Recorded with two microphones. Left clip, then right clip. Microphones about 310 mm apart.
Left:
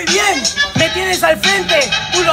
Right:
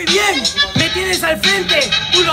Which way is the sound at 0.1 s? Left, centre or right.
Centre.